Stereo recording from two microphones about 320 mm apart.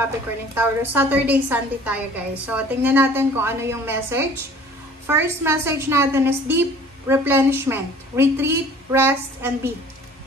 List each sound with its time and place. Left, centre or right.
0.6 s a woman's voice: centre